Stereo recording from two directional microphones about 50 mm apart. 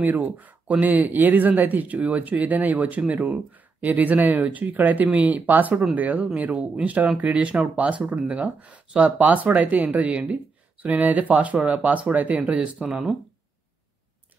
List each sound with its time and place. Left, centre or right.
0.0 s speech: right